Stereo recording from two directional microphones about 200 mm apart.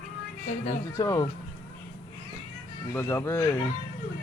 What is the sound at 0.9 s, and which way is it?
Speech, 15° left (ahead or behind).